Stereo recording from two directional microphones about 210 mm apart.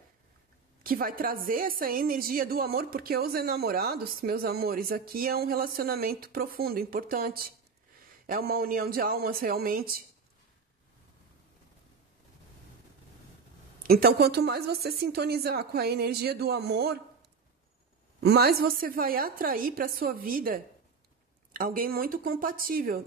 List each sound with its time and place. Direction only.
0.8 s a woman's voice: 45° right (ahead or behind)
13.8 s a woman's voice: 45° right (ahead or behind)
18.2 s a woman's voice: 50° right (ahead or behind)